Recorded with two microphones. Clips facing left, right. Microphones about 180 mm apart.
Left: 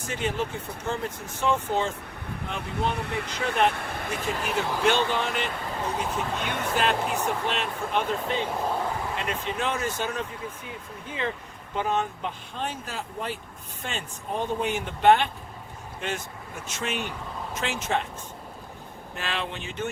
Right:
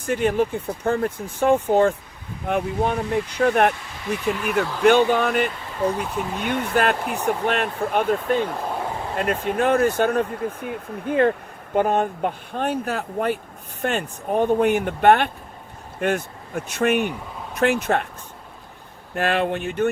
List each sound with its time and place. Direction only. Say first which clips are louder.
0.0 s speech: right 9 dB; 55° right (ahead or behind)
3.0 s speech: right 8 dB; 65° left (ahead or behind)
3.3 s speech: right 6 dB; 60° right (ahead or behind)
3.8 s a sound: left 1 dB; 55° left (ahead or behind)
4.8 s speech: right 9 dB; 55° right (ahead or behind)
19.1 s speech: right 11 dB; 55° right (ahead or behind)